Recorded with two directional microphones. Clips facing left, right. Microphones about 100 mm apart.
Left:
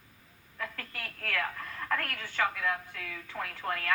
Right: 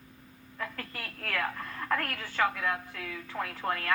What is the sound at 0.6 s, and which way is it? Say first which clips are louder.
A woman's voice: right 1 dB; 25° right (ahead or behind).